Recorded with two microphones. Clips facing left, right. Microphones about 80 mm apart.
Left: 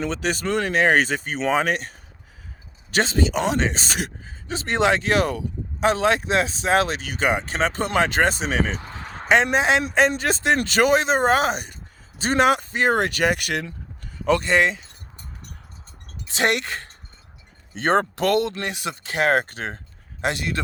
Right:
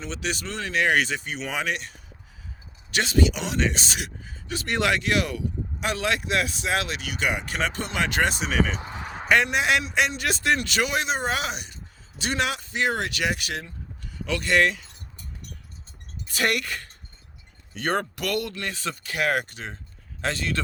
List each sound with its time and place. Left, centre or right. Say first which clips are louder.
0.1 s speech: left 7 dB; left
0.8 s speech: left 2 dB; left
4.2 s speech: left 3 dB; left
8.8 s basketball bounce: right 1 dB; centre
9.5 s speech: left 4 dB; left
9.8 s speech: left 5 dB; left
14.0 s a sound: left 9 dB; left
14.4 s speech: left 2 dB; left
16.3 s speech: left 3 dB; left
19.5 s speech: left 6 dB; left
20.2 s speech: left 3 dB; centre